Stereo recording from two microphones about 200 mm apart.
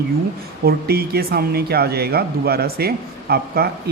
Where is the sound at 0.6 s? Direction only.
50° right (ahead or behind).